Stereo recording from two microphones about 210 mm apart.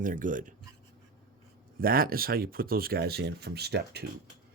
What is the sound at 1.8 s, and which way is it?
Speech, 45° right (ahead or behind).